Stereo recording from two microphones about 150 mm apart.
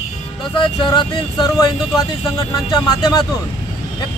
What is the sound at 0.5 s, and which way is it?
Speech, 30° left (ahead or behind).